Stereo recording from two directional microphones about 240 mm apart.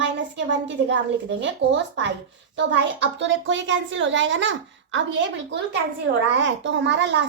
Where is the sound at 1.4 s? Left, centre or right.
Right.